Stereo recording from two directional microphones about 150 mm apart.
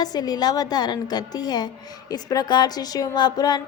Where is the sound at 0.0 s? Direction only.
25° left (ahead or behind).